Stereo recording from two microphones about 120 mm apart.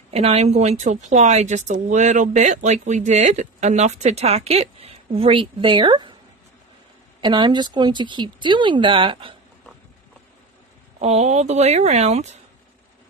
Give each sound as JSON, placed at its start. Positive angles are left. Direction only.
{"t": 0.1, "sound": "a woman's voice", "side_deg": -60}
{"t": 7.2, "sound": "speech", "side_deg": -40}
{"t": 11.0, "sound": "a woman's voice", "side_deg": -65}